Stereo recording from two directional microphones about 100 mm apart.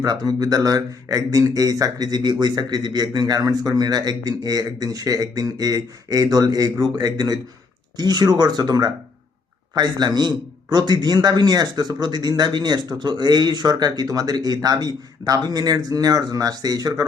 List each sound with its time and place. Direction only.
0.0 s a man's voice: 40° right (ahead or behind)